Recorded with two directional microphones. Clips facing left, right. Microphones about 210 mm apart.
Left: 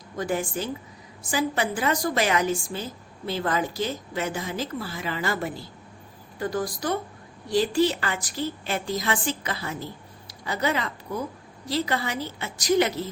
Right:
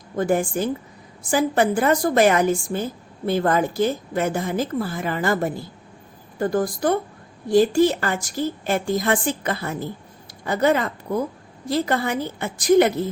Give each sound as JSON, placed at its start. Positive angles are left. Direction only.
{"t": 0.2, "sound": "a woman's voice", "side_deg": -50}